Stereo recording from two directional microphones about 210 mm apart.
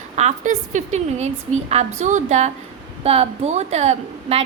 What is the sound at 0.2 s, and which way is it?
A woman's voice, 35° right (ahead or behind).